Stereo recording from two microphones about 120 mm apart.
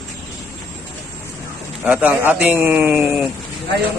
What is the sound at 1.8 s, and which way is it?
A man's voice, 10° right (ahead or behind).